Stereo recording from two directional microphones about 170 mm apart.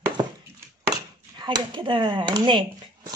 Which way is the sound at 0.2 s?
25° right (ahead or behind).